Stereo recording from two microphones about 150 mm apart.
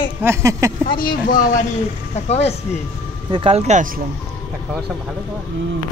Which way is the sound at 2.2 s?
45° left (ahead or behind).